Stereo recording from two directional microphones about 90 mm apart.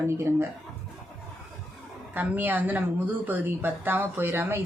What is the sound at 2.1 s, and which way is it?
A woman's voice, 20° right (ahead or behind).